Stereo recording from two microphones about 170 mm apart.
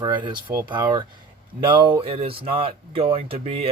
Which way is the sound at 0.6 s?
25° right (ahead or behind).